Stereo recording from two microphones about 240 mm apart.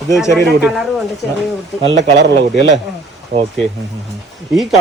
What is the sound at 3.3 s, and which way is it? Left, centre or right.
Speech, right.